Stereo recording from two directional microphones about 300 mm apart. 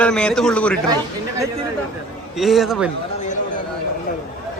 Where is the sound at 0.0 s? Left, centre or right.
Centre.